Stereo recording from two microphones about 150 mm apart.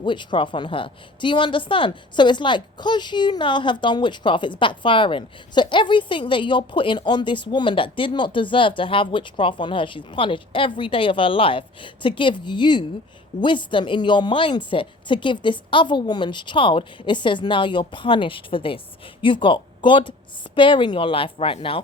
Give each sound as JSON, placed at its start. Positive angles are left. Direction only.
{"t": 0.0, "sound": "a woman's voice", "side_deg": 30}